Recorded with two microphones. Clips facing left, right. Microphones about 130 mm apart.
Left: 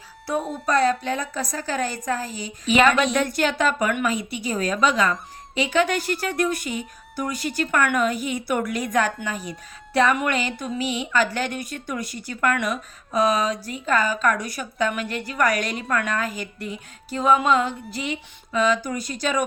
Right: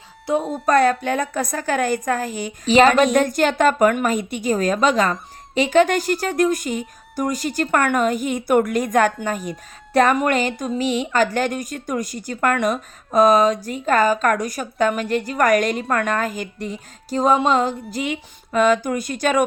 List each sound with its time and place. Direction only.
0.3 s speech: 20° right (ahead or behind)
0.6 s a woman's voice: 55° right (ahead or behind)
2.6 s a woman's voice: 35° right (ahead or behind); by 19.4 s 50° right (ahead or behind)